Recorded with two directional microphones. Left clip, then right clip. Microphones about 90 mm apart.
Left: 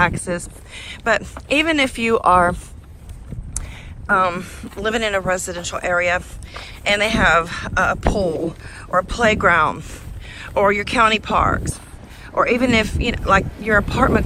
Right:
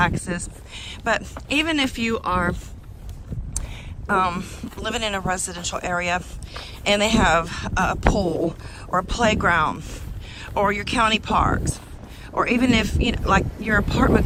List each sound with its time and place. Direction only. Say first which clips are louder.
0.0 s speech: left 4 dB; 20° right (ahead or behind)
0.7 s speech: left 4 dB; 40° right (ahead or behind)
2.0 s speech: left 9 dB; centre (ahead or behind)
4.0 s speech: left 4 dB; 45° right (ahead or behind)
6.9 s speech: left 3 dB; 50° right (ahead or behind); by 10.7 s 35° right (ahead or behind)
10.7 s speech: left 5 dB; 25° right (ahead or behind)
13.7 s speech: left 4 dB; 15° right (ahead or behind)